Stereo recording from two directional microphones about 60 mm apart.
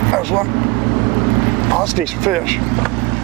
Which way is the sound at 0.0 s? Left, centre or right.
Centre.